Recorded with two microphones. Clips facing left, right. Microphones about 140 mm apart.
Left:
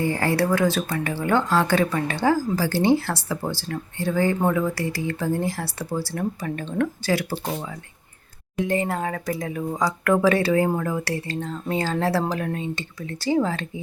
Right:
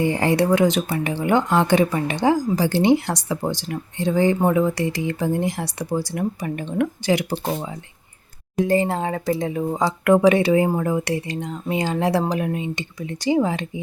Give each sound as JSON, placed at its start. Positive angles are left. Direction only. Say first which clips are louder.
{"t": 0.0, "sound": "speech", "louder": "right 3 dB", "side_deg": -20}
{"t": 8.5, "sound": "speech", "louder": "right 4 dB", "side_deg": -35}